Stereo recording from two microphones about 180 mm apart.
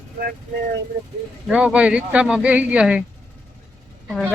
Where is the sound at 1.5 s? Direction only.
5° right (ahead or behind).